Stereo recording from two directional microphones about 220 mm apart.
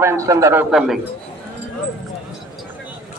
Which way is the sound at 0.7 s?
Centre (ahead or behind).